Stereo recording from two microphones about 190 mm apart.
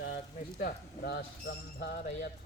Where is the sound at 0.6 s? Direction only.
55° left (ahead or behind).